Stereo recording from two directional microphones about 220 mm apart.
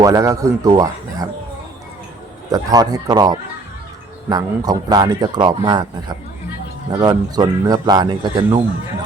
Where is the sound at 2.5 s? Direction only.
15° right (ahead or behind).